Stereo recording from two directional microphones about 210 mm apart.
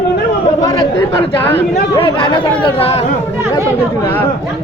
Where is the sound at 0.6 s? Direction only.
15° left (ahead or behind).